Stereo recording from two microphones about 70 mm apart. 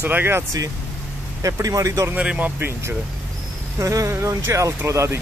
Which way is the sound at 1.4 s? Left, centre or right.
Right.